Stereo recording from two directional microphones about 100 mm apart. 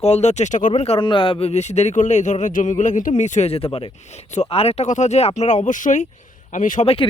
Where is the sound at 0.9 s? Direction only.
55° left (ahead or behind); by 1.9 s 90° left.